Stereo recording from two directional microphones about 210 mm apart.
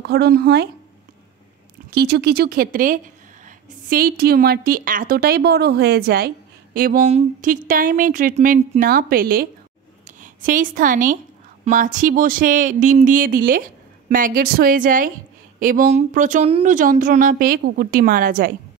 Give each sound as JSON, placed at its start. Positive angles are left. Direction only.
{"t": 0.0, "sound": "a woman's voice", "side_deg": -50}
{"t": 1.9, "sound": "a woman's voice", "side_deg": -50}